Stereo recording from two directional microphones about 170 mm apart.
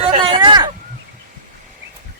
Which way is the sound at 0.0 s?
30° right (ahead or behind).